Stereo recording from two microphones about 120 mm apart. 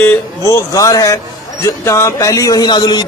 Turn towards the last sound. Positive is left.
turn(degrees=35)  # may be behind; listen again after turning